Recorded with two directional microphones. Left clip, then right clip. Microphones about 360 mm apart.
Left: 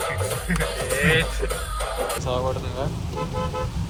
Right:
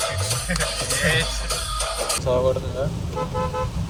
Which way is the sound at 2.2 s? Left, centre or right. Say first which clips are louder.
Right 9 dB; centre.